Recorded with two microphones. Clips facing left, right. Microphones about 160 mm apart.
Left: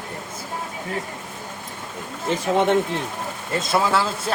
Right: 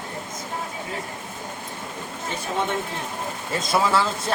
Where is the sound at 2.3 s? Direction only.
90° left.